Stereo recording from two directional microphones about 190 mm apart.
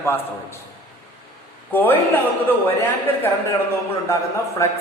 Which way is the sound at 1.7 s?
10° left (ahead or behind).